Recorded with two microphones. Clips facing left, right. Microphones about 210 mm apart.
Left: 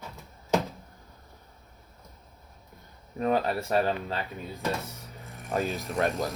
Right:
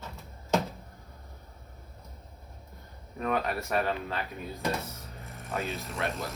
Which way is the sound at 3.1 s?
30° left (ahead or behind).